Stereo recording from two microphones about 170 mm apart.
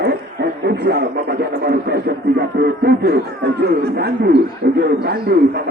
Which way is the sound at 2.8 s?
70° right (ahead or behind).